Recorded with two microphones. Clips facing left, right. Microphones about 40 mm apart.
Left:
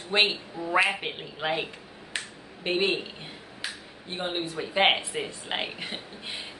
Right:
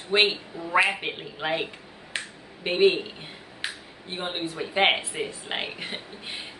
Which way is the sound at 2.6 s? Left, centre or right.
Centre.